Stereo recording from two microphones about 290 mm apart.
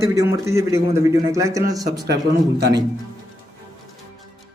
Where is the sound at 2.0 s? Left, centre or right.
Right.